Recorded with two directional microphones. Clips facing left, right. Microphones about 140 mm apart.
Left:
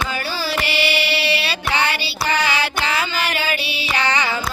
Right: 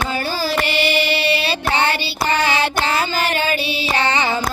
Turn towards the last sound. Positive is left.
turn(degrees=-40)  # may be behind; listen again after turning